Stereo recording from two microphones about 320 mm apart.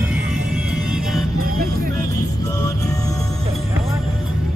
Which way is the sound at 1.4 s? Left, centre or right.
Right.